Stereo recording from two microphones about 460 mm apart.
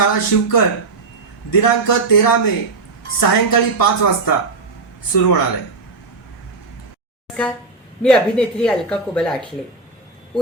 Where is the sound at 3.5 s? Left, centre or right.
Left.